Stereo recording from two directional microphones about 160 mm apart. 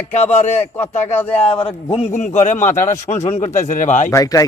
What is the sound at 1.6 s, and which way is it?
A man's voice, 35° left (ahead or behind).